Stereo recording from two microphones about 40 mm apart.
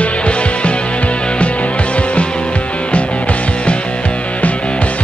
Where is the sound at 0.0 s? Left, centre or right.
Left.